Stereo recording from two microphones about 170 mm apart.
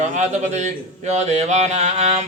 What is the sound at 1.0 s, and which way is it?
Mantra, 40° right (ahead or behind).